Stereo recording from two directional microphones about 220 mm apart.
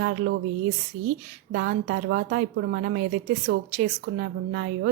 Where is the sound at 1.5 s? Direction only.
50° right (ahead or behind).